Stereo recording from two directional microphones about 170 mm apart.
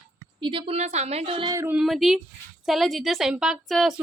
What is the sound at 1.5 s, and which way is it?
Speech, 10° right (ahead or behind).